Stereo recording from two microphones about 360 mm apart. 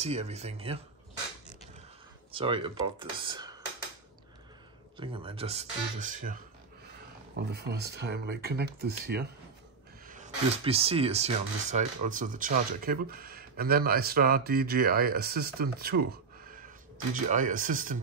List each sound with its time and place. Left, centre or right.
0.0 s speech: centre
2.3 s speech: centre
4.9 s speech: centre
7.5 s speech: right